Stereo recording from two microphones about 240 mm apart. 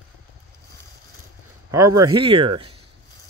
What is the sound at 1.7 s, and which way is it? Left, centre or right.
Speech, centre.